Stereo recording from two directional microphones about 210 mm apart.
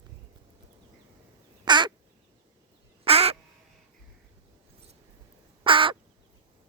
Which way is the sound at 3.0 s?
30° right (ahead or behind).